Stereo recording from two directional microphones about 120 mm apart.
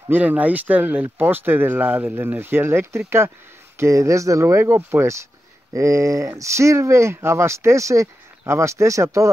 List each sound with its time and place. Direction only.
0.1 s speech: 15° right (ahead or behind)